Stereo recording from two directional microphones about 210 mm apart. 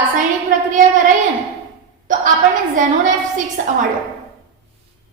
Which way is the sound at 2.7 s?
35° right (ahead or behind).